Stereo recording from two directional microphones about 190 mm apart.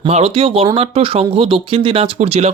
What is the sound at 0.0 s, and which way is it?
Speech, 30° right (ahead or behind).